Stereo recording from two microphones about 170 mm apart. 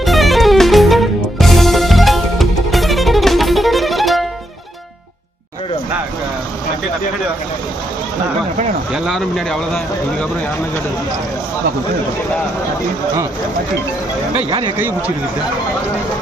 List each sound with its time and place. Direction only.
0.0 s music: centre (ahead or behind)
8.9 s speech: centre (ahead or behind)
14.3 s speech: 30° right (ahead or behind)
14.8 s speech: 10° right (ahead or behind)